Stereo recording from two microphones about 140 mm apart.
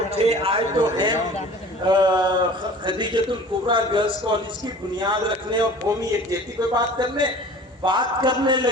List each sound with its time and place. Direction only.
0.1 s a man's voice: 45° right (ahead or behind)